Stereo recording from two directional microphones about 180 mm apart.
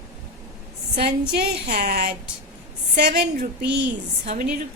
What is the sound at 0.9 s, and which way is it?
A woman's voice, 60° right (ahead or behind).